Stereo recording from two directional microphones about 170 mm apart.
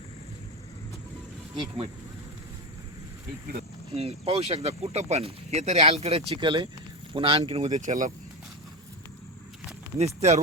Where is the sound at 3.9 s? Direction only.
40° right (ahead or behind).